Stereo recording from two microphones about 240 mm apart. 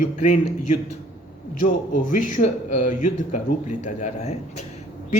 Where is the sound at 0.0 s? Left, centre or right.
Left.